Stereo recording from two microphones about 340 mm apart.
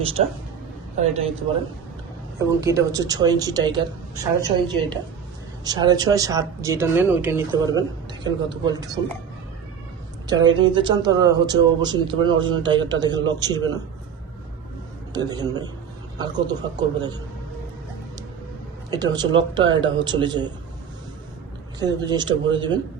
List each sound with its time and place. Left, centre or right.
1.0 s a man's voice: centre
2.6 s speech: centre
10.2 s speech: centre
15.1 s speech: centre
18.9 s speech: centre
21.8 s speech: centre